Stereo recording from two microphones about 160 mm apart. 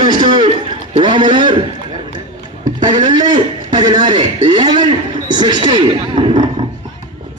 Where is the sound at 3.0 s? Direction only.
25° right (ahead or behind).